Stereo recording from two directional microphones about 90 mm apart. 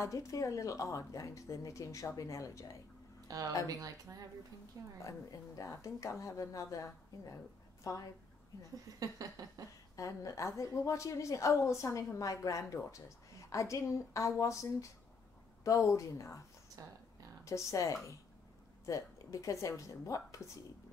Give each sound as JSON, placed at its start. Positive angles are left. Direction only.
{"t": 0.0, "sound": "a woman's voice", "side_deg": 35}
{"t": 3.3, "sound": "a woman's voice", "side_deg": -40}
{"t": 5.0, "sound": "a woman's voice", "side_deg": 35}
{"t": 8.7, "sound": "a sound", "side_deg": -40}
{"t": 9.9, "sound": "a woman's voice", "side_deg": 35}
{"t": 16.8, "sound": "speech", "side_deg": -40}
{"t": 17.5, "sound": "a woman's voice", "side_deg": 35}